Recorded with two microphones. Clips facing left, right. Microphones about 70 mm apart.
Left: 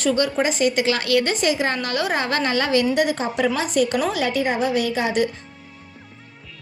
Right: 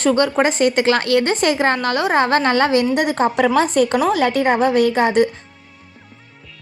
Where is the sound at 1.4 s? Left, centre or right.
Right.